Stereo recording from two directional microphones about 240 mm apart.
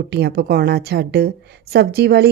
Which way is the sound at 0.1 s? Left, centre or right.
Right.